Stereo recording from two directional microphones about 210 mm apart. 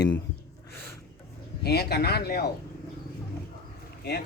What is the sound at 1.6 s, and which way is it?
Speech, 50° left (ahead or behind).